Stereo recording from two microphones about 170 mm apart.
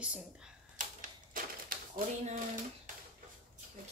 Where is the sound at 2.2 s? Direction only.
50° right (ahead or behind).